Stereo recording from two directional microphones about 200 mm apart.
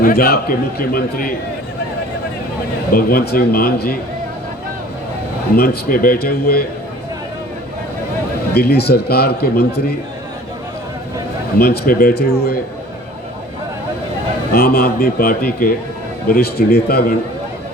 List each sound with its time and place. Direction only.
0.0 s a man's voice: 50° left (ahead or behind)
2.9 s a man's voice: 50° left (ahead or behind)
5.5 s a man's voice: 50° left (ahead or behind)
8.5 s a man's voice: 55° left (ahead or behind)
11.5 s a man's voice: 50° left (ahead or behind)
14.5 s a man's voice: 50° left (ahead or behind)